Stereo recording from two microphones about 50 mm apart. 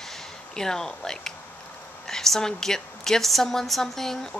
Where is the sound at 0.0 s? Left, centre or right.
Centre.